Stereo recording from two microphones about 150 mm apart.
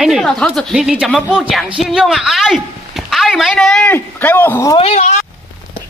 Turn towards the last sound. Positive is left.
turn(degrees=50)  # may be behind; listen again after turning